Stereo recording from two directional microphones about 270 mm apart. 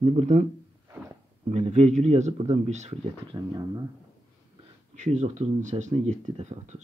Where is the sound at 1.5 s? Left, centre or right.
Right.